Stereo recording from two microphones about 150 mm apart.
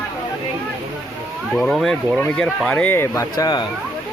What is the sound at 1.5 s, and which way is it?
Speech, centre (ahead or behind).